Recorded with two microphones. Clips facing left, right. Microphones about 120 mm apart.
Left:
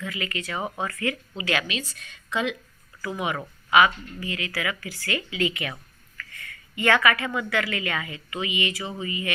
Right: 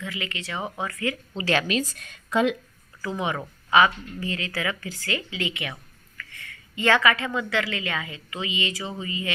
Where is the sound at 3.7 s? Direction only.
30° right (ahead or behind).